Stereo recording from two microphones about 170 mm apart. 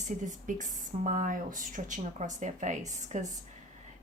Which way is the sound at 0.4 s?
50° right (ahead or behind).